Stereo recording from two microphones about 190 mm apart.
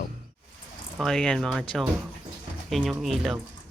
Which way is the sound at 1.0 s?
Centre (ahead or behind).